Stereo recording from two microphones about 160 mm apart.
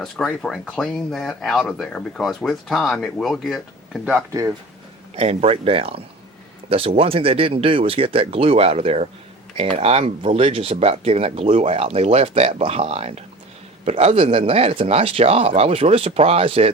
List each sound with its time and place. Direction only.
0.0 s speech: 5° left (ahead or behind)
5.1 s speech: 40° right (ahead or behind)